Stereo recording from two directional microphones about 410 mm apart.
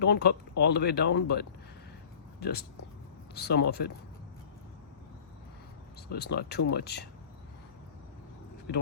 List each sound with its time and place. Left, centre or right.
0.0 s speech: left
6.1 s speech: left